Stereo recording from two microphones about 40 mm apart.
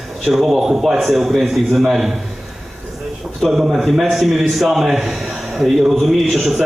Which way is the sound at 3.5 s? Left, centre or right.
Centre.